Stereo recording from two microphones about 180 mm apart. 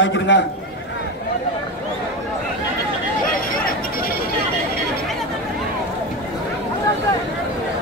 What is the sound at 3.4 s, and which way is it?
Chatter, 55° left (ahead or behind).